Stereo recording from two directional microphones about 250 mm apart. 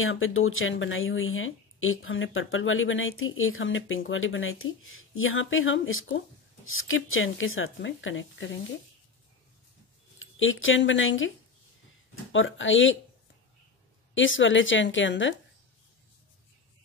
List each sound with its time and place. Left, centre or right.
0.0 s speech: left
10.1 s speech: left
14.1 s speech: left